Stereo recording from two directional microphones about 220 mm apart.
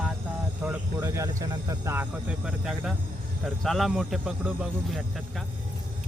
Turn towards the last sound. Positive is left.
turn(degrees=0)  # may be behind; listen again after turning